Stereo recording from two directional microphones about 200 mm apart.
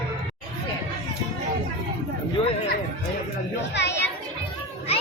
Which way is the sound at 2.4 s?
25° left (ahead or behind).